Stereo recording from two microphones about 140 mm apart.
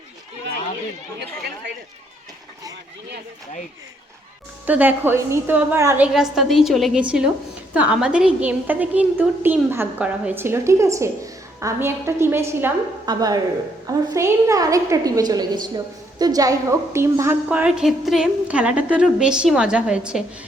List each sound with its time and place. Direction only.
4.6 s a woman's voice: 10° right (ahead or behind)
6.0 s a woman's voice: centre (ahead or behind); by 12.7 s 15° right (ahead or behind)
13.1 s a woman's voice: 30° right (ahead or behind); by 20.2 s 5° right (ahead or behind)